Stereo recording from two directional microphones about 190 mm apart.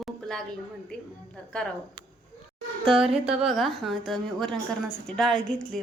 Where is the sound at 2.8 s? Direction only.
30° right (ahead or behind).